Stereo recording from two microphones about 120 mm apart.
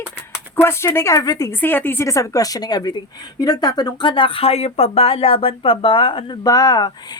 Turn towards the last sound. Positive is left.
turn(degrees=35)  # may be behind; listen again after turning